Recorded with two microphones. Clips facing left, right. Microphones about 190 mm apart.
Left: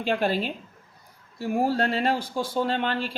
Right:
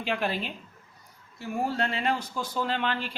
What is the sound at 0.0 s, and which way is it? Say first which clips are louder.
Speech: left 5 dB; 30° left (ahead or behind).